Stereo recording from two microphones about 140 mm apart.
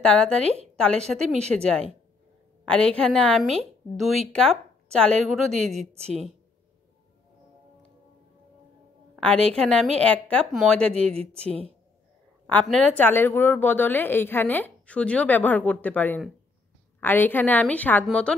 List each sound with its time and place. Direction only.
0.0 s a woman's voice: 5° left (ahead or behind)
5.5 s a woman's voice: 50° right (ahead or behind)
5.9 s a woman's voice: 5° left (ahead or behind)
9.1 s a woman's voice: 5° left (ahead or behind)
10.9 s a woman's voice: 50° right (ahead or behind)
12.6 s a woman's voice: 5° left (ahead or behind)